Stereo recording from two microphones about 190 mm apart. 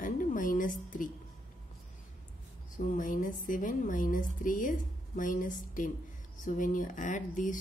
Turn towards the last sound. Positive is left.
turn(degrees=40)  # may be behind; listen again after turning